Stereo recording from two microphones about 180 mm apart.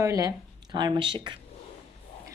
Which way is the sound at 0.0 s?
20° right (ahead or behind).